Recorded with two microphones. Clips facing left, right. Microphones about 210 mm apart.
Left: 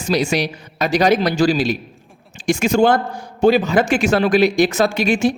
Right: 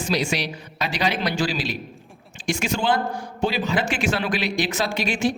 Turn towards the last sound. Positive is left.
turn(degrees=45)  # may be behind; listen again after turning